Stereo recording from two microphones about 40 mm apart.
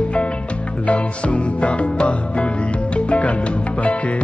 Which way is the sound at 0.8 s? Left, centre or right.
Left.